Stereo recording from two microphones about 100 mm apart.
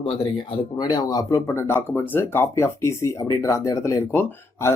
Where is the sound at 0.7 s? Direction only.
40° left (ahead or behind).